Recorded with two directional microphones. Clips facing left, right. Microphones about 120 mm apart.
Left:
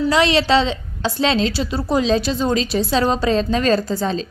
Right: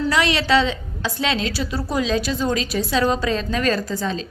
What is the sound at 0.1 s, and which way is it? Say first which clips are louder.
A woman's voice: left 3 dB; 25° left (ahead or behind).